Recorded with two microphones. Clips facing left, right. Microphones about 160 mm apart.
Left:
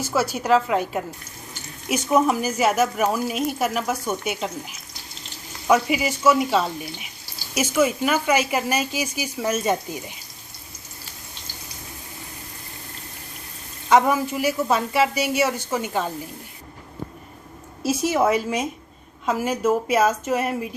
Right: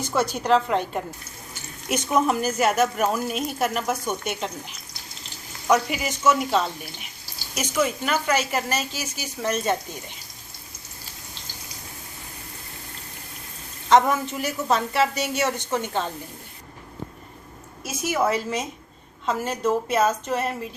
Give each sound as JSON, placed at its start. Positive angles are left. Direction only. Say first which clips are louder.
{"t": 0.0, "sound": "speech", "louder": "left 1 dB", "side_deg": 5}
{"t": 5.6, "sound": "speech", "louder": "left 2 dB", "side_deg": 5}
{"t": 13.9, "sound": "speech", "louder": "left 1 dB", "side_deg": 10}
{"t": 17.8, "sound": "a woman's voice", "louder": "left 4 dB", "side_deg": 30}
{"t": 18.3, "sound": "speech", "louder": "left 3 dB", "side_deg": 15}